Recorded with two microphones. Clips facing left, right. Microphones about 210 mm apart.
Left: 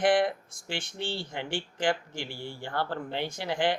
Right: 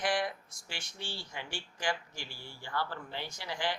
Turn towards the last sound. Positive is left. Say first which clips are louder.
# left 8 dB
turn(degrees=55)  # may be behind; listen again after turning